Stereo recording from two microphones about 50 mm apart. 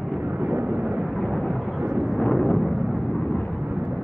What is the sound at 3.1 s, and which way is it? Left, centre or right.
Vehicle, left.